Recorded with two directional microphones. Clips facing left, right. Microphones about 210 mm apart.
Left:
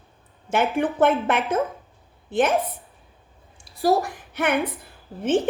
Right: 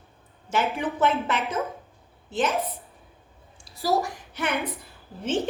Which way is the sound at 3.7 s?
55° left (ahead or behind).